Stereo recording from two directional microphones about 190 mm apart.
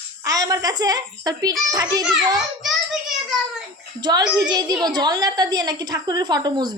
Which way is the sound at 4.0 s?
20° right (ahead or behind).